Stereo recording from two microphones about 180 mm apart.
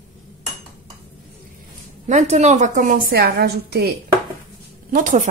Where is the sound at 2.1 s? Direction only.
40° right (ahead or behind); by 3.9 s 60° right (ahead or behind).